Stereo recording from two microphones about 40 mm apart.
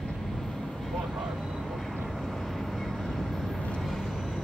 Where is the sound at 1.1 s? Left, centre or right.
Centre.